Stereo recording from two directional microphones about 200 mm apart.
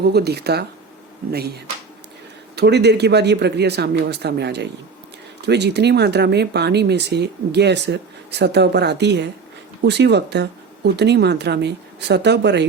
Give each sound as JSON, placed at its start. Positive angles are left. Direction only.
{"t": 0.0, "sound": "speech", "side_deg": -55}